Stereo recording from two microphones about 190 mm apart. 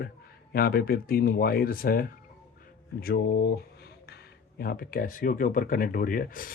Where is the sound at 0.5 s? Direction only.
55° left (ahead or behind).